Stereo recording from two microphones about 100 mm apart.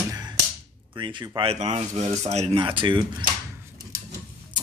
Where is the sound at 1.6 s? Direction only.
90° right.